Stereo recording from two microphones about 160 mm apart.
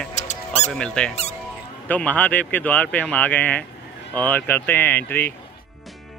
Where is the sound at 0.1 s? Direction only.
45° left (ahead or behind).